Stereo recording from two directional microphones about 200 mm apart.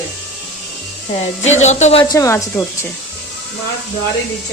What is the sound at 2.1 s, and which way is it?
Speech, 15° left (ahead or behind).